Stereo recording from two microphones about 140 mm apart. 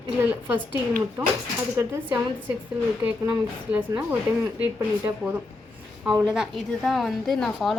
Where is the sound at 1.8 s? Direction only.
15° right (ahead or behind).